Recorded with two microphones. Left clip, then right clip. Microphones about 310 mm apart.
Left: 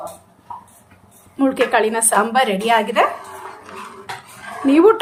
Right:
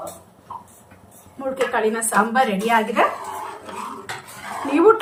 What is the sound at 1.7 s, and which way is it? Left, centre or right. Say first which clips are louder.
A woman's voice: left 3 dB; left.